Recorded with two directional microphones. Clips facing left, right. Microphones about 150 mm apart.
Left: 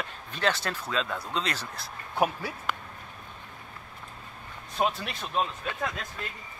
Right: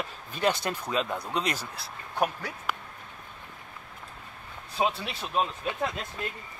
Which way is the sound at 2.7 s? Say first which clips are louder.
Even; 10° right (ahead or behind).